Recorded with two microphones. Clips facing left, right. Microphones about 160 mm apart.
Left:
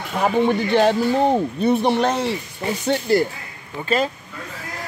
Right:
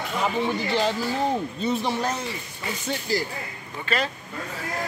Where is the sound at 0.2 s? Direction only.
60° left (ahead or behind).